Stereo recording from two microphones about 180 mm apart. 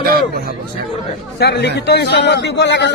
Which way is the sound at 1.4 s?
65° left (ahead or behind).